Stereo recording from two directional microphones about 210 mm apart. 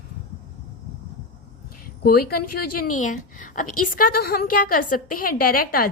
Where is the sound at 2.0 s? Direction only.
45° left (ahead or behind).